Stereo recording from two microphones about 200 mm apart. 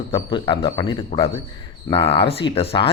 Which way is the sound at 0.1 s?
25° left (ahead or behind).